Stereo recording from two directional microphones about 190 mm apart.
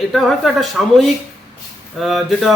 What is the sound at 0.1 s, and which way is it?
A man's voice, centre (ahead or behind).